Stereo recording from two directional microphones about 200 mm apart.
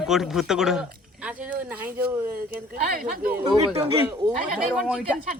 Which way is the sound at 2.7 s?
45° right (ahead or behind).